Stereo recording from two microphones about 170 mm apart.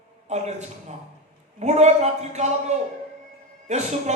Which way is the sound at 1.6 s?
40° right (ahead or behind).